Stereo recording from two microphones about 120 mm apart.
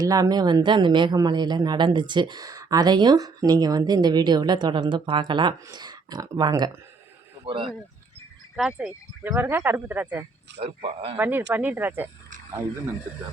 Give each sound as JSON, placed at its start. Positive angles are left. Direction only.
{"t": 0.0, "sound": "speech", "side_deg": -30}
{"t": 7.4, "sound": "speech", "side_deg": -45}
{"t": 8.5, "sound": "speech", "side_deg": -5}
{"t": 9.2, "sound": "speech", "side_deg": -15}
{"t": 10.6, "sound": "speech", "side_deg": -50}
{"t": 11.2, "sound": "speech", "side_deg": -15}